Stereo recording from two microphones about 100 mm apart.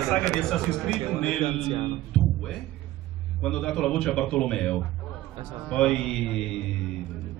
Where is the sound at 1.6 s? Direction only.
55° right (ahead or behind).